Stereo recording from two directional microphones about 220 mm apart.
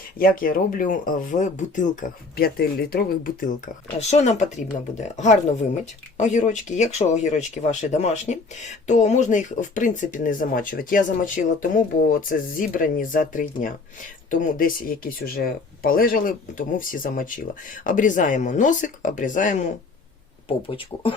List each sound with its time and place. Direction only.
0.2 s speech: 40° left (ahead or behind)
4.1 s speech: 30° left (ahead or behind)
20.5 s speech: 25° left (ahead or behind)